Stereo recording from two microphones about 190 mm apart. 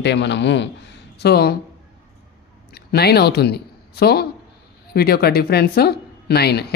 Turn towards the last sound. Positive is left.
turn(degrees=60)  # may be behind; listen again after turning